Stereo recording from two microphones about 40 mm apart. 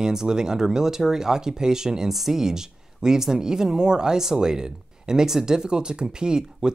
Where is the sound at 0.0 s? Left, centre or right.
Centre.